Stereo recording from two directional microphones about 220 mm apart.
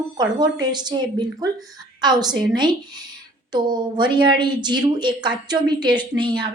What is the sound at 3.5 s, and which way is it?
A woman's voice, 20° right (ahead or behind).